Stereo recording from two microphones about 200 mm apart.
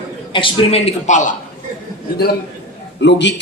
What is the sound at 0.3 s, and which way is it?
A man's voice, 25° left (ahead or behind).